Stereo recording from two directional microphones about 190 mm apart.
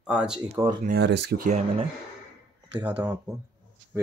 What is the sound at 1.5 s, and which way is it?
Speech, 35° right (ahead or behind).